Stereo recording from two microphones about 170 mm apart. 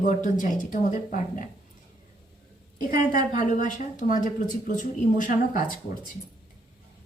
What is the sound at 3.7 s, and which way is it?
A woman's voice, 50° left (ahead or behind).